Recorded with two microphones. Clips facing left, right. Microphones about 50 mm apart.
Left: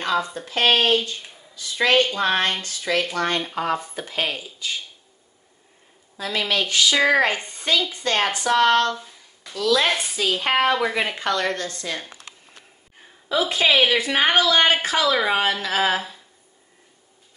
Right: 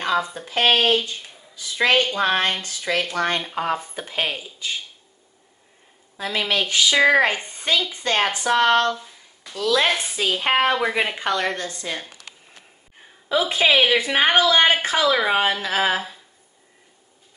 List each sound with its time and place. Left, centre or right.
0.0 s a woman's voice: centre
6.1 s a woman's voice: right
8.9 s a sound: centre
9.6 s a woman's voice: right
9.8 s speech: centre
10.1 s a woman's voice: centre
13.3 s a woman's voice: right